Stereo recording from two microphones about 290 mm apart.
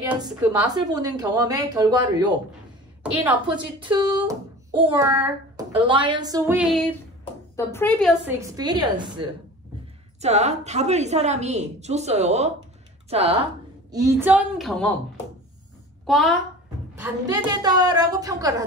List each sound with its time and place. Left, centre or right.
0.1 s a woman's voice: centre
3.5 s a woman's voice: centre
8.0 s a woman's voice: centre
13.9 s a woman's voice: centre
16.1 s a woman's voice: centre